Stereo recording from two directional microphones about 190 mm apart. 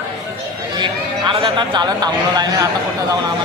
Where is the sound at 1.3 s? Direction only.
25° right (ahead or behind).